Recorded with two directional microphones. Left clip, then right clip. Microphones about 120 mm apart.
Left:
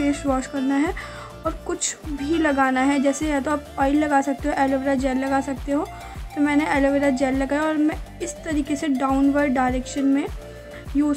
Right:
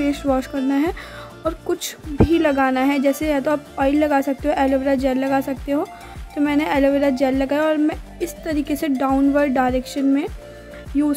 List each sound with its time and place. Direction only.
0.3 s speech: 35° right (ahead or behind)